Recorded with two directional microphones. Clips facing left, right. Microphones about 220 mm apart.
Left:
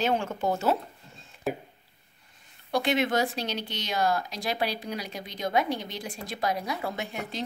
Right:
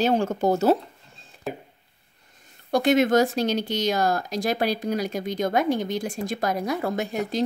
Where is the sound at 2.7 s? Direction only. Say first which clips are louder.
Right 7 dB; 45° right (ahead or behind).